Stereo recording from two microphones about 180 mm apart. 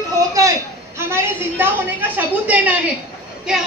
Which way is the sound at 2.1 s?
10° right (ahead or behind).